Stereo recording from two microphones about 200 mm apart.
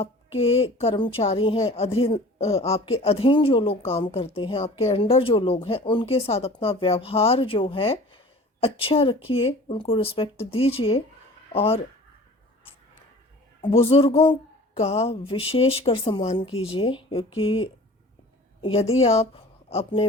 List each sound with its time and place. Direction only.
0.0 s a woman's voice: 30° left (ahead or behind)
13.6 s a woman's voice: 25° left (ahead or behind)